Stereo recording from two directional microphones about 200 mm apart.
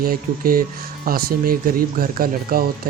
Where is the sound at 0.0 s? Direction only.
45° right (ahead or behind).